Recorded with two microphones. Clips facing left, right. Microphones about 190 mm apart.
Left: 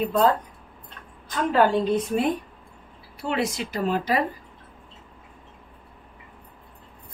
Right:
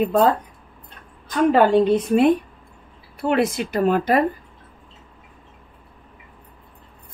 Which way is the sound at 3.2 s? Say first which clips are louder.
Right 6 dB; 55° right (ahead or behind).